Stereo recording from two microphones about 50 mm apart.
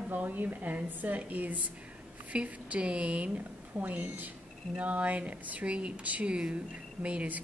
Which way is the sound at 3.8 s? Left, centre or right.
Right.